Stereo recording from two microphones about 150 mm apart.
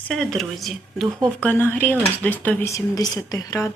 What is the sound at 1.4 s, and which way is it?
A woman's voice, 15° left (ahead or behind).